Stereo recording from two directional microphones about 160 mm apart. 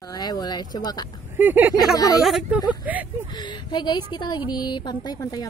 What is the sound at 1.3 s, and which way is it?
Speech, 10° right (ahead or behind).